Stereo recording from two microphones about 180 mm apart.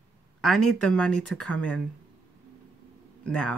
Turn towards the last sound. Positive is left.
turn(degrees=5)  # may be behind; listen again after turning